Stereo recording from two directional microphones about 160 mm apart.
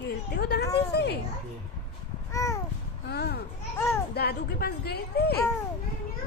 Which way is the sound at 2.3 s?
20° left (ahead or behind).